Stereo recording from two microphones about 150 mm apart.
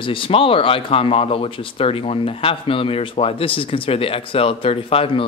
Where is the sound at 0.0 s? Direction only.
35° left (ahead or behind).